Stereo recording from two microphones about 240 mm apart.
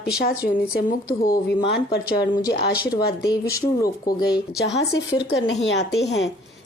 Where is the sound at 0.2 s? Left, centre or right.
Left.